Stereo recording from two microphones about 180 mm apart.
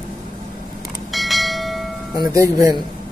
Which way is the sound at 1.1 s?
Centre (ahead or behind).